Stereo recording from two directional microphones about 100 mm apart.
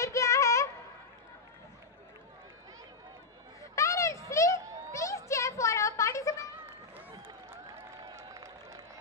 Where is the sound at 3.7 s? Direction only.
30° left (ahead or behind).